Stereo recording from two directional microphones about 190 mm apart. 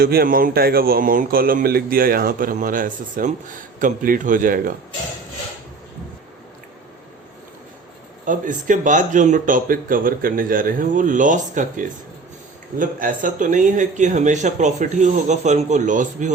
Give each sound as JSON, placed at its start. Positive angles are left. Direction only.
{"t": 0.0, "sound": "speech", "side_deg": -55}
{"t": 8.2, "sound": "speech", "side_deg": -45}